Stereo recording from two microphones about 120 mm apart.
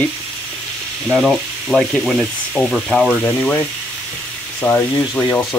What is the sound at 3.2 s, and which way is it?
Frying, 10° left (ahead or behind).